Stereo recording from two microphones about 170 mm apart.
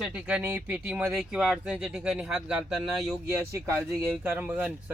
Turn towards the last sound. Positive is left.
turn(degrees=-10)  # may be behind; listen again after turning